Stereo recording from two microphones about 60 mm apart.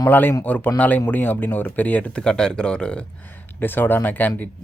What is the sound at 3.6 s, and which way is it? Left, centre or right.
Speech, left.